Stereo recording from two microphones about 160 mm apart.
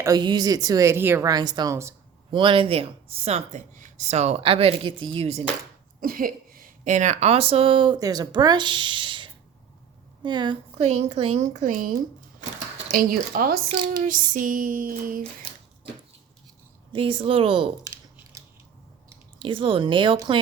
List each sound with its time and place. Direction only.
0.0 s speech: 25° right (ahead or behind)
2.3 s speech: 30° right (ahead or behind)
6.0 s speech: 60° right (ahead or behind); by 10.6 s 30° right (ahead or behind)
10.8 s a woman's voice: 45° right (ahead or behind)
12.9 s female singing: 65° right (ahead or behind)
16.9 s speech: 35° right (ahead or behind)
18.3 s scissors: 20° right (ahead or behind)
19.4 s speech: 30° right (ahead or behind)